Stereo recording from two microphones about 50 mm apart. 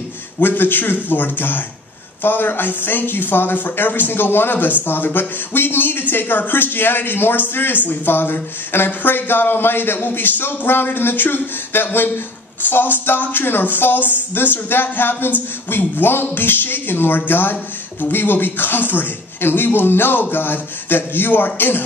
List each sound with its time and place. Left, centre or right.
0.4 s a man's voice: left